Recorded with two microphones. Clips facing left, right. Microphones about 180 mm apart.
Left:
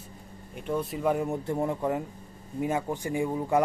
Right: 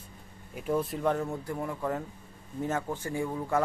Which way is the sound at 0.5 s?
Centre (ahead or behind).